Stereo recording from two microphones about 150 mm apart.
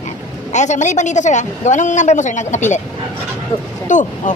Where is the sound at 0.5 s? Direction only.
50° left (ahead or behind).